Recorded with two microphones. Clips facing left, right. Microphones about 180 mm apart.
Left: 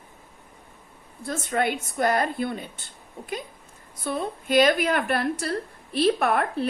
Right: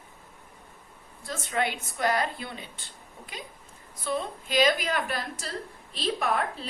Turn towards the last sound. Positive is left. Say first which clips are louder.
# left 5 dB
turn(degrees=60)  # may be behind; listen again after turning